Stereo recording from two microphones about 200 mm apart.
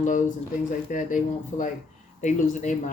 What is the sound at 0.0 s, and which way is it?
Speech, 40° left (ahead or behind).